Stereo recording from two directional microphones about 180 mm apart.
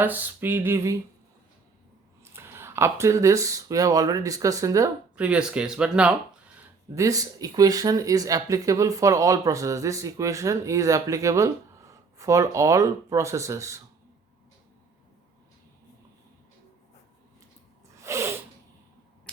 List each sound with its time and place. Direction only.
0.0 s speech: 10° right (ahead or behind)
2.2 s speech: 15° right (ahead or behind)
5.1 s speech: 5° right (ahead or behind)
6.9 s speech: 20° right (ahead or behind)
18.0 s sneeze: 15° right (ahead or behind)